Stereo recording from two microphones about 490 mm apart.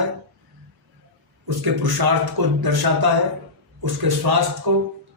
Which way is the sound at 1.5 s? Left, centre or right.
Right.